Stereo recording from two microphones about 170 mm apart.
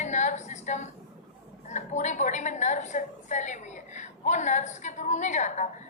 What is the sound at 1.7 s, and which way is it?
A woman's voice, 45° left (ahead or behind).